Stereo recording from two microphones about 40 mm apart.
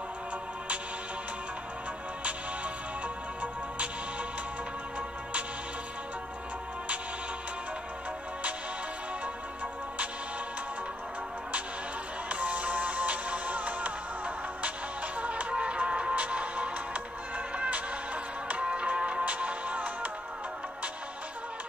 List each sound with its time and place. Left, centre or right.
12.3 s music: right
19.2 s music: right